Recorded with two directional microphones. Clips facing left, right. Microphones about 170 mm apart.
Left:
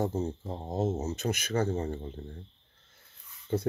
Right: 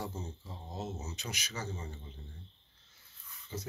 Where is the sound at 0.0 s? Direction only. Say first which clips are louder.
Left 11 dB; 45° left (ahead or behind).